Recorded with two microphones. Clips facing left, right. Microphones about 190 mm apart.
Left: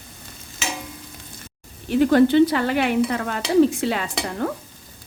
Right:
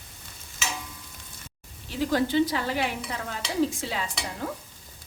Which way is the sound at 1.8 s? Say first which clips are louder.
Left 10 dB; 60° left (ahead or behind).